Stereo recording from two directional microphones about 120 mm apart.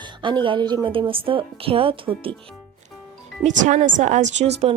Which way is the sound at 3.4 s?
90° right.